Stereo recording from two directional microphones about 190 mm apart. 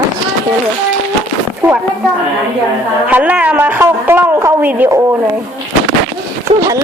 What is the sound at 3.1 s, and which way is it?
A woman's voice, 10° right (ahead or behind).